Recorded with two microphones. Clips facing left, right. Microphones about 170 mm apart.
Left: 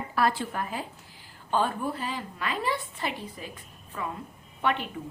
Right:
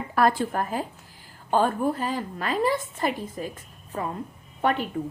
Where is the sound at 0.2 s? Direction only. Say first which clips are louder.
Right 5 dB; 50° right (ahead or behind).